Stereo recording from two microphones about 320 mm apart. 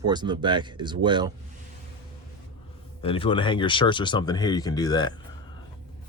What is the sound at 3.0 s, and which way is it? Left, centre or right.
Speech, centre.